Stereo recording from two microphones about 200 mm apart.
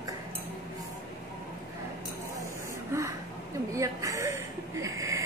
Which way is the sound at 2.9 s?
15° right (ahead or behind).